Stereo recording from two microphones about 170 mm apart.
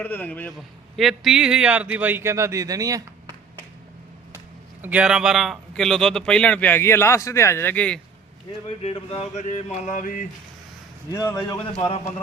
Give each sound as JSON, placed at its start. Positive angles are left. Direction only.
{"t": 0.0, "sound": "a man's voice", "side_deg": 10}
{"t": 4.8, "sound": "speech", "side_deg": -5}
{"t": 8.8, "sound": "a sound", "side_deg": 35}
{"t": 11.1, "sound": "a man's voice", "side_deg": 20}